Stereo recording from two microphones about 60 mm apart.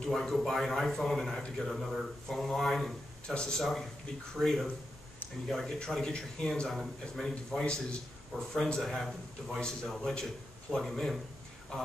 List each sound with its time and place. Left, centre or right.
0.0 s speech: centre
6.7 s speech: centre
7.6 s speech: centre
8.7 s speech: centre